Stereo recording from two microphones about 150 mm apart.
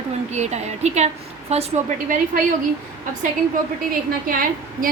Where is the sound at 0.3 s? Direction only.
50° right (ahead or behind).